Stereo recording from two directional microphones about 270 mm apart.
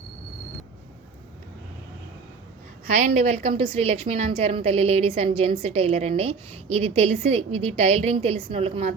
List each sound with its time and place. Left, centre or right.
2.9 s a woman's voice: right